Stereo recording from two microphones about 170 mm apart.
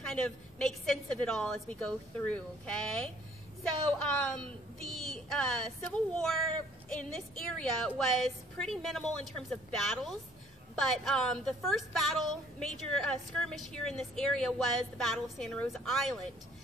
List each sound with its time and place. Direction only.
0.0 s a woman's voice: 5° left (ahead or behind)
4.2 s a woman's voice: 5° left (ahead or behind)